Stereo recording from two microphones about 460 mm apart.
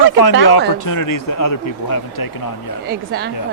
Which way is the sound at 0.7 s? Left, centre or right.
Left.